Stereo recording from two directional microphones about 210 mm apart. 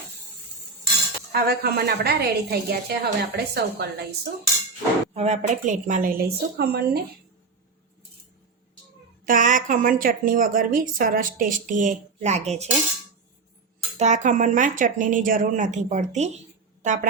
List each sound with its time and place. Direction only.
1.3 s a woman's voice: 50° right (ahead or behind)
5.1 s a woman's voice: 30° right (ahead or behind); by 7.0 s 50° right (ahead or behind)
9.2 s a woman's voice: 40° right (ahead or behind)
14.0 s a woman's voice: 35° right (ahead or behind)